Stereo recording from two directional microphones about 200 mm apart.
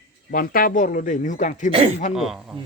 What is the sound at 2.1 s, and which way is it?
Speech, centre (ahead or behind).